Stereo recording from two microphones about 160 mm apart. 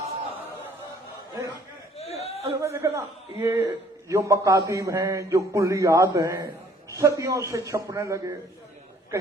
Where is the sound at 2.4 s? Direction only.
20° right (ahead or behind).